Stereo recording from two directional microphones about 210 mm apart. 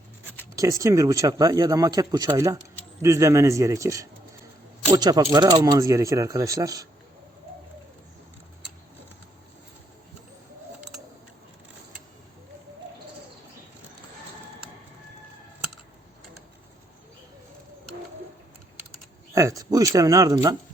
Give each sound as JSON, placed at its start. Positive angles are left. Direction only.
{"t": 0.5, "sound": "speech", "side_deg": -15}
{"t": 19.3, "sound": "speech", "side_deg": -15}